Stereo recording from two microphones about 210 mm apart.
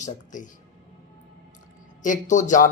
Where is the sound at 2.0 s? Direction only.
35° left (ahead or behind).